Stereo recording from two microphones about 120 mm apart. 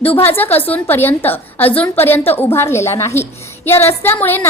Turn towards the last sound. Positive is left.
turn(degrees=15)  # may be behind; listen again after turning